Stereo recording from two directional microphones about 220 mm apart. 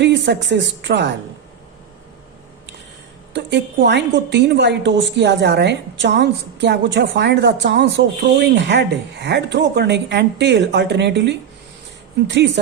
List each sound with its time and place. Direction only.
0.0 s a woman's voice: 55° right (ahead or behind)
3.3 s a woman's voice: 50° right (ahead or behind)